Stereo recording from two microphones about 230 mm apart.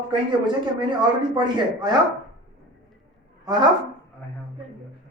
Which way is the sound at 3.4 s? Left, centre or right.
Centre.